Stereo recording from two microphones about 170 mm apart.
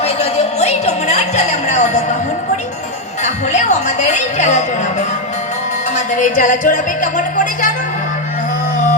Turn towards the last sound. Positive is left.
turn(degrees=50)  # may be behind; listen again after turning